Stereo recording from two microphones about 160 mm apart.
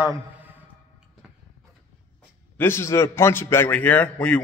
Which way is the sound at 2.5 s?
15° left (ahead or behind).